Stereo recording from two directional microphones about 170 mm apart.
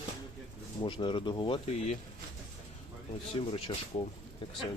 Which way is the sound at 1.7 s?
40° left (ahead or behind).